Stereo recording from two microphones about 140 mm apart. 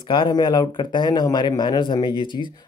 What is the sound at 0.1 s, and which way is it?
Speech, 35° left (ahead or behind).